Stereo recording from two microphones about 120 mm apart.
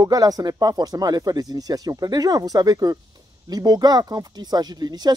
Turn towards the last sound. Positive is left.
turn(degrees=-35)  # may be behind; listen again after turning